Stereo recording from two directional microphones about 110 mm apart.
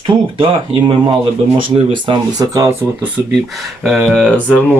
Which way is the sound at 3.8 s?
5° right (ahead or behind).